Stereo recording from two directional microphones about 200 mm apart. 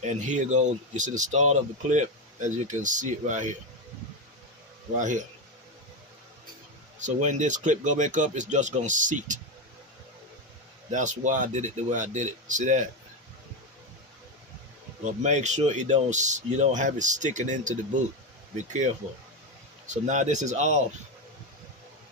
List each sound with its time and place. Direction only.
0.3 s speech: 35° right (ahead or behind)
4.9 s speech: 40° right (ahead or behind)
7.0 s speech: 35° right (ahead or behind)
10.9 s speech: 40° right (ahead or behind)
15.0 s speech: 35° right (ahead or behind)
19.9 s speech: 35° right (ahead or behind)